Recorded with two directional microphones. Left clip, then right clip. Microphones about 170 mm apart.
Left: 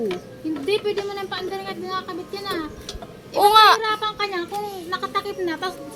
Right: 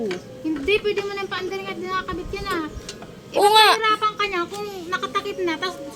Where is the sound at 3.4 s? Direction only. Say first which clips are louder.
Left 1 dB; 40° right (ahead or behind).